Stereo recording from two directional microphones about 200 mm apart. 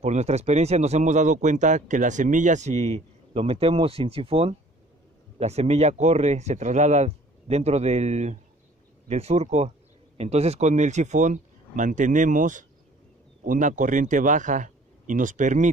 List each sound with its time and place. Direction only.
0.0 s speech: 35° right (ahead or behind)